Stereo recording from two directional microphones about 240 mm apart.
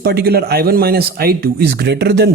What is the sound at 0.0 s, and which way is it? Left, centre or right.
Speech, right.